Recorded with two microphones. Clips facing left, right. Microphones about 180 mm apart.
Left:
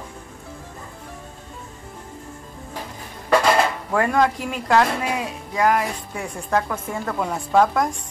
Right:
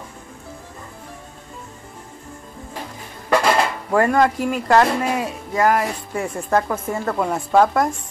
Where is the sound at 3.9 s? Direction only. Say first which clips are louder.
Right 5 dB; centre (ahead or behind).